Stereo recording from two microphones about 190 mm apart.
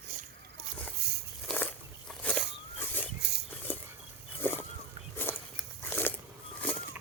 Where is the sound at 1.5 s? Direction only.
5° left (ahead or behind).